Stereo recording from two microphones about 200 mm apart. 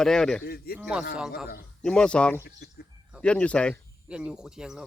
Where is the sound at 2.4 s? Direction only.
50° left (ahead or behind).